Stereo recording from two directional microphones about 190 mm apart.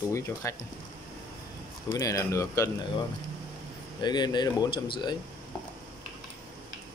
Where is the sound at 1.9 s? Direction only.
15° left (ahead or behind).